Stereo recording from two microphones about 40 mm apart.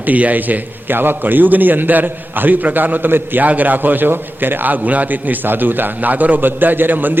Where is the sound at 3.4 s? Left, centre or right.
Right.